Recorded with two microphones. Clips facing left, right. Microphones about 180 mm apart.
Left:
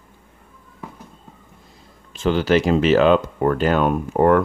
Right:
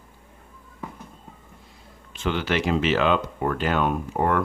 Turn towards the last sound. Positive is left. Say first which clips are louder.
# left 7 dB
turn(degrees=45)  # may be behind; listen again after turning